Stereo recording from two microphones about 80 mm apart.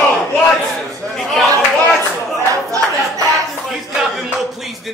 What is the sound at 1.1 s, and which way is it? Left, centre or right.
Speech, centre.